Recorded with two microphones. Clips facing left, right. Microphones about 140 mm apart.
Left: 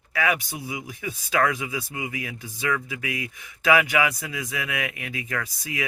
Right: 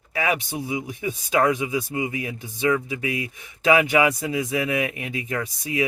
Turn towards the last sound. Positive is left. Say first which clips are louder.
# right 5 dB
turn(degrees=-20)  # may be behind; listen again after turning